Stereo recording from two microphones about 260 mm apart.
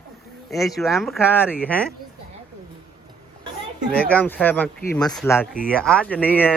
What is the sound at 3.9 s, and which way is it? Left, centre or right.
Speech, centre.